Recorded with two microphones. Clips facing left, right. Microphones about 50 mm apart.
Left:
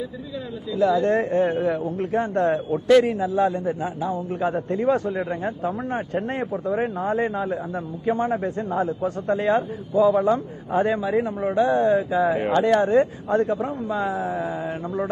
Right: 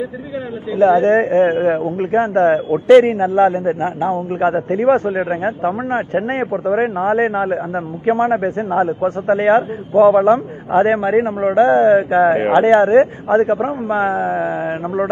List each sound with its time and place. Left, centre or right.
0.7 s a man's voice: right